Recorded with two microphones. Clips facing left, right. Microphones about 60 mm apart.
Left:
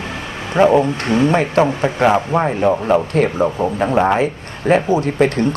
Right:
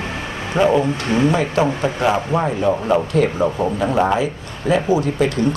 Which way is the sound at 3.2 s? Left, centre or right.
Left.